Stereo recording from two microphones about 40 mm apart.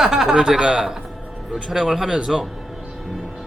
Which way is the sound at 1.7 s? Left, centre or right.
Centre.